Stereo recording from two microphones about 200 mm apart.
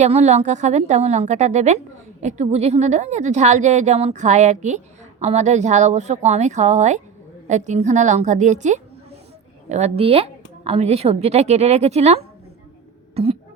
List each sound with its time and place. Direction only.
0.0 s a woman's voice: 35° right (ahead or behind)